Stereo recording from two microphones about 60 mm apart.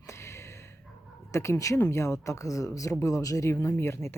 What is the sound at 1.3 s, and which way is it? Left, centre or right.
Speech, left.